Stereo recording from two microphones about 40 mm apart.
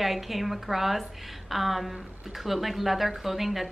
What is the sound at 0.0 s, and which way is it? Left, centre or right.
Speech, centre.